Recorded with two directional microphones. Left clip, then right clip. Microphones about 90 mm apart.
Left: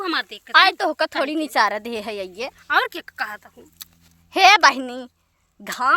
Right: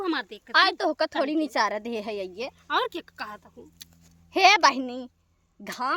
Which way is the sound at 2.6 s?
40° right (ahead or behind).